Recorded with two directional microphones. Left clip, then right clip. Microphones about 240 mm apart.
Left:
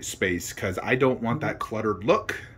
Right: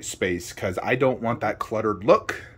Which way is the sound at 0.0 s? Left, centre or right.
Centre.